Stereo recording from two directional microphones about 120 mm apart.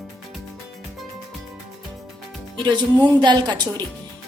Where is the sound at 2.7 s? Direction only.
40° right (ahead or behind).